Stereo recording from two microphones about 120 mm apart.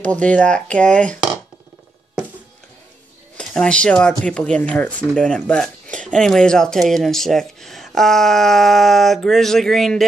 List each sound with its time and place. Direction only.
0.0 s speech: 10° left (ahead or behind)
3.3 s speech: 5° left (ahead or behind)